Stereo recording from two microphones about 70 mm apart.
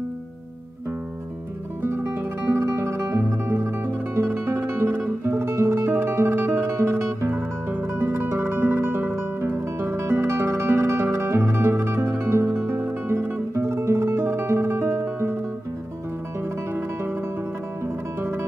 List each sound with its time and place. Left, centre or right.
1.8 s music: right
2.5 s music: right
16.7 s music: right